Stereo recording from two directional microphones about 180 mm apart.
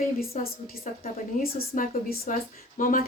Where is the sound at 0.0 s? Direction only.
55° left (ahead or behind).